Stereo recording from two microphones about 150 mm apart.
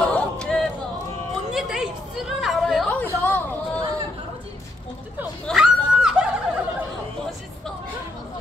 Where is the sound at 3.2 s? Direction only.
10° left (ahead or behind).